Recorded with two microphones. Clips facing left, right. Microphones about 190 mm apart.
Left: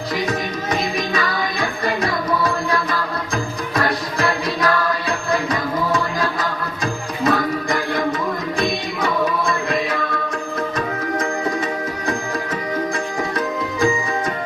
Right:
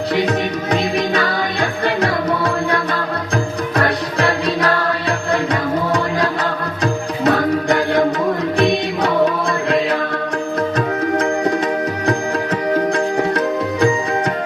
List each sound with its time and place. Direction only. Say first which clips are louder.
0.2 s music: right 5 dB; 65° right (ahead or behind)
3.8 s music: right 2 dB; 65° right (ahead or behind)
7.3 s music: right 4 dB; 70° right (ahead or behind)
9.6 s mantra: right 5 dB; 70° right (ahead or behind)
12.7 s music: right 7 dB; 70° right (ahead or behind)